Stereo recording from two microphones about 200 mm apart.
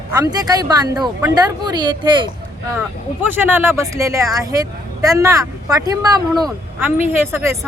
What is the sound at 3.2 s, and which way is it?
Speech, 10° right (ahead or behind).